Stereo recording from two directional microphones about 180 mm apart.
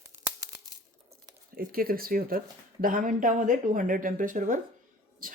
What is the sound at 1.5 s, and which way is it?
Speech, 55° right (ahead or behind).